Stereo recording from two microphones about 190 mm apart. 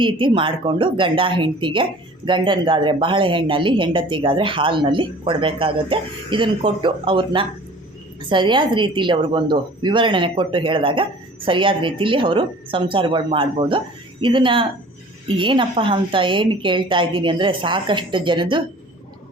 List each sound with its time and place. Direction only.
0.0 s speech: 25° right (ahead or behind)